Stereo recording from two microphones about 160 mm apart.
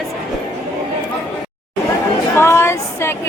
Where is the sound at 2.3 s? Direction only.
15° left (ahead or behind).